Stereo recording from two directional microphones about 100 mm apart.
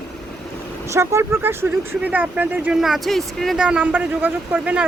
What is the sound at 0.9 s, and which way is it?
Speech, 30° right (ahead or behind).